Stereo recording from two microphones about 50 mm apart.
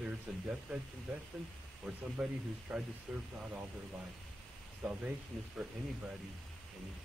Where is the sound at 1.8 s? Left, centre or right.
Centre.